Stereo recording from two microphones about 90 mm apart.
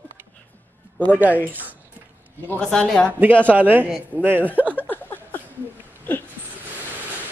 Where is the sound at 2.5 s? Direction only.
5° left (ahead or behind).